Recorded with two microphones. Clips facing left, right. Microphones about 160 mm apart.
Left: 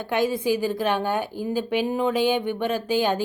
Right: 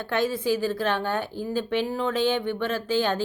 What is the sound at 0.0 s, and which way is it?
A woman's voice, 15° left (ahead or behind).